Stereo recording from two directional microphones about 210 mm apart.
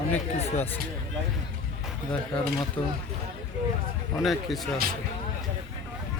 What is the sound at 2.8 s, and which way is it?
Speech, 5° left (ahead or behind).